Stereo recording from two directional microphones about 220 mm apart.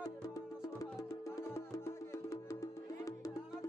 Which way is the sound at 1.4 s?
15° left (ahead or behind).